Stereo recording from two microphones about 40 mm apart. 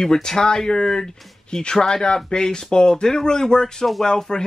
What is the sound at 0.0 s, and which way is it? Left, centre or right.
Speech, centre.